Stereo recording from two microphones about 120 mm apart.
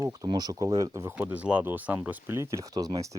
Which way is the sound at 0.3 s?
35° right (ahead or behind).